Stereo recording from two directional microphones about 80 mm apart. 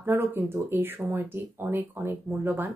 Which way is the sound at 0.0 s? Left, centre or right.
Right.